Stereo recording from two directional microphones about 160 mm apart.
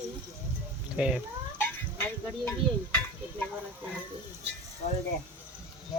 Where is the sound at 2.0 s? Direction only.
15° left (ahead or behind).